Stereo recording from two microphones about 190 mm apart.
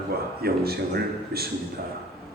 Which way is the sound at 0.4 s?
55° right (ahead or behind).